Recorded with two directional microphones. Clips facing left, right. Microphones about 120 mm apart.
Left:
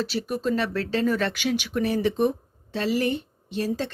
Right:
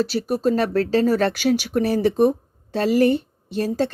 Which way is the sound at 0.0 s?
40° right (ahead or behind).